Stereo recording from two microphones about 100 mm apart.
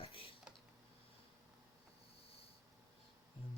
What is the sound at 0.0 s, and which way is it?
Typing, 70° left (ahead or behind).